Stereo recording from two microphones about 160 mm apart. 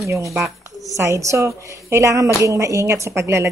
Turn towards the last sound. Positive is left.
turn(degrees=-20)  # may be behind; listen again after turning